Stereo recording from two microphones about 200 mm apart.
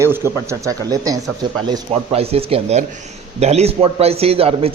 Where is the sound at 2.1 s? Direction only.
30° right (ahead or behind).